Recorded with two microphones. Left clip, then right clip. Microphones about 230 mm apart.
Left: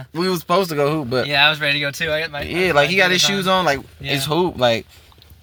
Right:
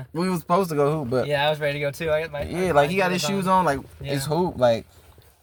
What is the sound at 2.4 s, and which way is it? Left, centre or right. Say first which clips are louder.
Speech: left 5 dB; centre.